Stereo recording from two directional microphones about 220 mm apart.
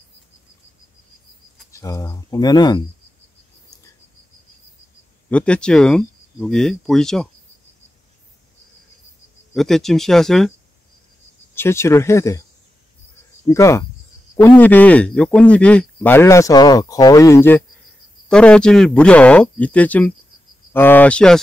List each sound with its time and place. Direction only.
1.7 s speech: 15° left (ahead or behind)
5.3 s speech: 5° left (ahead or behind)
9.5 s speech: centre (ahead or behind)
11.5 s speech: 10° left (ahead or behind)
13.5 s speech: 15° left (ahead or behind)